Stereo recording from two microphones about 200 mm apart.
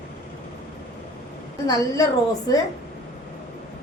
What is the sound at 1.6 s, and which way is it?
Speech, 20° left (ahead or behind).